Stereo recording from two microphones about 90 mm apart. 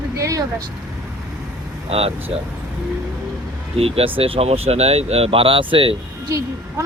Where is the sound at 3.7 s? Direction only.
90° right.